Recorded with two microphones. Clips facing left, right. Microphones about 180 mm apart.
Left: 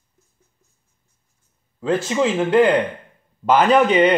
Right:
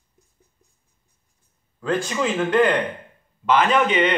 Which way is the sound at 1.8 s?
25° left (ahead or behind).